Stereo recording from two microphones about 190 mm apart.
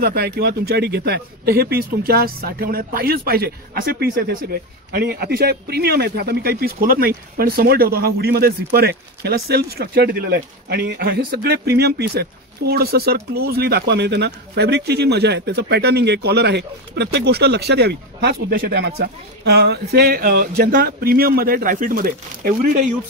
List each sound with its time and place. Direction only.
0.0 s speech: 55° right (ahead or behind)